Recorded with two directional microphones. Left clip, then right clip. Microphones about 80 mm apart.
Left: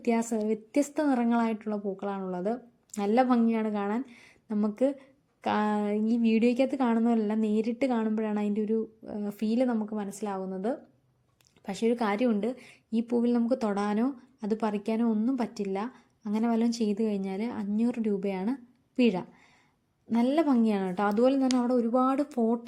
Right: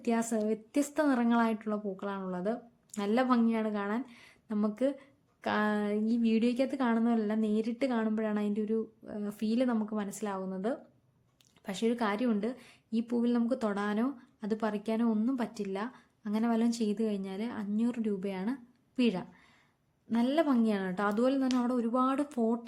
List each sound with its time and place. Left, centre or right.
0.0 s a woman's voice: centre
1.0 s a woman's voice: centre
2.4 s speech: left
9.7 s a woman's voice: centre
11.9 s speech: left